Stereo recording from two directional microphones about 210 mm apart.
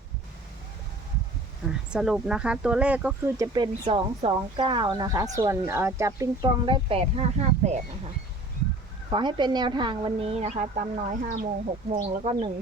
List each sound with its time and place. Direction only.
1.9 s speech: 5° right (ahead or behind); by 7.8 s 30° right (ahead or behind)
9.0 s speech: 20° right (ahead or behind)